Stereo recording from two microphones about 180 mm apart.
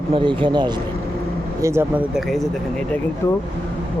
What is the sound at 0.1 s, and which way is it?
Speech, 25° right (ahead or behind).